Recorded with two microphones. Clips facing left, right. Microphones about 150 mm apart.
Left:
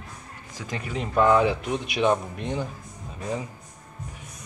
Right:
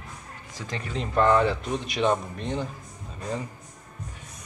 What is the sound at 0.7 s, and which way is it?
A man's voice, 5° left (ahead or behind).